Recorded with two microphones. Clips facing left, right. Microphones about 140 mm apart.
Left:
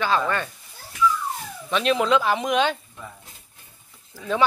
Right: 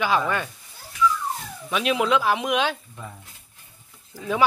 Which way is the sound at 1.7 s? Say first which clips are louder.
Left 1 dB; 5° right (ahead or behind).